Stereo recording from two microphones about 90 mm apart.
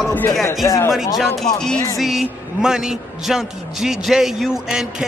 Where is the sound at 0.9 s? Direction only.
5° right (ahead or behind).